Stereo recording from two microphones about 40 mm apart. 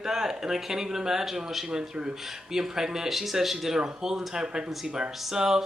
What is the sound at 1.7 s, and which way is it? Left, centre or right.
Speech, centre.